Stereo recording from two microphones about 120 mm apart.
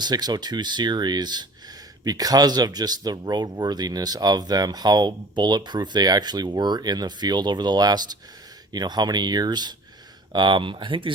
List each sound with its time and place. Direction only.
0.0 s speech: 35° right (ahead or behind)